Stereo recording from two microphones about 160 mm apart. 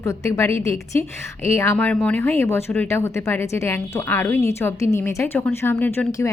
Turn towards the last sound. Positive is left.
turn(degrees=15)  # may be behind; listen again after turning